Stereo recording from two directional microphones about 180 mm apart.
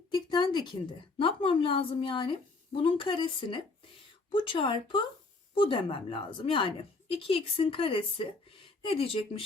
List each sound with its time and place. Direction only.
0.1 s a woman's voice: 25° left (ahead or behind)